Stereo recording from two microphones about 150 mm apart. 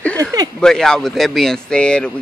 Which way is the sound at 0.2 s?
25° right (ahead or behind).